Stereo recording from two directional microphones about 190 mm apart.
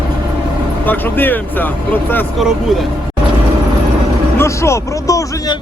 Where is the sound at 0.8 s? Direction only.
10° left (ahead or behind).